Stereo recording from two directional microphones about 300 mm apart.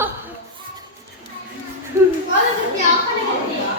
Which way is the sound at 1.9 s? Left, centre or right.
Centre.